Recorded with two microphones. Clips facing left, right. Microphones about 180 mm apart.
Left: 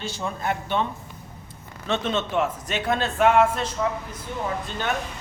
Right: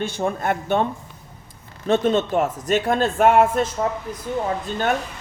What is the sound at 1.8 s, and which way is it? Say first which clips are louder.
Speech: right 7 dB; 45° right (ahead or behind).